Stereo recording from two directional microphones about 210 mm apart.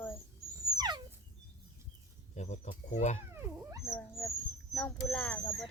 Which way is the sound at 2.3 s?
35° left (ahead or behind).